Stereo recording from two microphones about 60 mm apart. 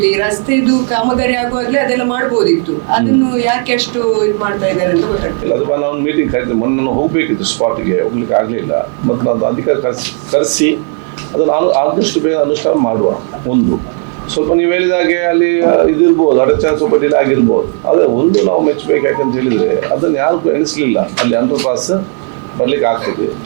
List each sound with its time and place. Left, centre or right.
0.0 s speech: centre